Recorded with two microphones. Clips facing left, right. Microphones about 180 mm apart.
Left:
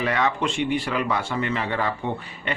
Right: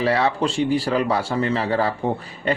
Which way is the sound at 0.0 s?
35° right (ahead or behind).